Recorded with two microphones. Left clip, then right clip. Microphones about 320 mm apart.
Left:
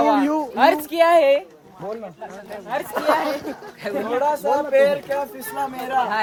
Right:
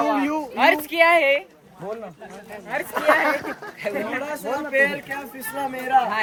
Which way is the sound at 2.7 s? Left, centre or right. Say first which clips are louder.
Right 1 dB; centre.